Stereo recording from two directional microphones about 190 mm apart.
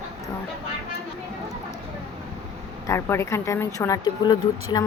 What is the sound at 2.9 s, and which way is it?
Speech, 15° left (ahead or behind).